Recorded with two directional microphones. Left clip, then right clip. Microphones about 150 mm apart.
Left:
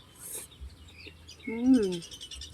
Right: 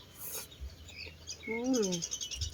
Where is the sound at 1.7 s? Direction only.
30° left (ahead or behind).